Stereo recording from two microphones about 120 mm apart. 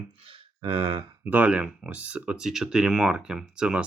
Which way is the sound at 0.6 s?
45° right (ahead or behind).